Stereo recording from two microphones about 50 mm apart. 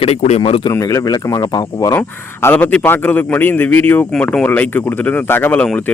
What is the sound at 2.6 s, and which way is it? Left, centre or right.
Speech, left.